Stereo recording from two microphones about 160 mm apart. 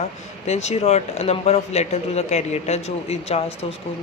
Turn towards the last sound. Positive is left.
turn(degrees=40)  # may be behind; listen again after turning